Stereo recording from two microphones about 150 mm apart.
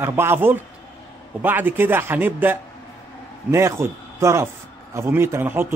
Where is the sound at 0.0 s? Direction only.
15° right (ahead or behind).